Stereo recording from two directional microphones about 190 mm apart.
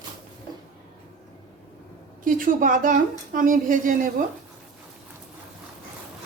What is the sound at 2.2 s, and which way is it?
Speech, 45° right (ahead or behind).